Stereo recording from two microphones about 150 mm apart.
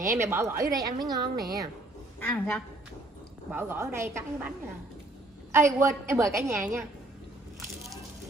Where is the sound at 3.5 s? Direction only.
15° right (ahead or behind).